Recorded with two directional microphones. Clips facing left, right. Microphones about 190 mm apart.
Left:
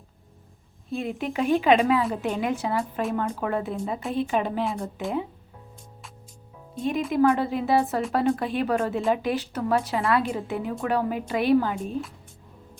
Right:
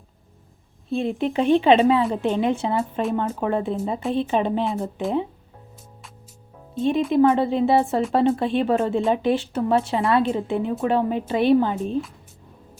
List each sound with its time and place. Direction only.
0.9 s a woman's voice: 30° right (ahead or behind)
6.7 s a woman's voice: 25° right (ahead or behind)